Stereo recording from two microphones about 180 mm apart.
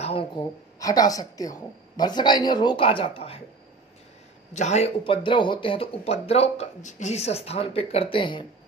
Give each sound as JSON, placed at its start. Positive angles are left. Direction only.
{"t": 0.0, "sound": "a sound", "side_deg": 30}
{"t": 0.7, "sound": "speech", "side_deg": 20}
{"t": 4.6, "sound": "speech", "side_deg": 40}